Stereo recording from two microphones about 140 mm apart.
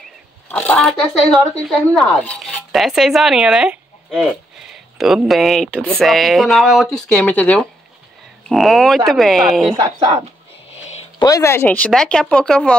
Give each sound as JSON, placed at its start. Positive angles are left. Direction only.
{"t": 0.5, "sound": "speech", "side_deg": 10}
{"t": 9.8, "sound": "speech", "side_deg": -30}
{"t": 11.1, "sound": "speech", "side_deg": 25}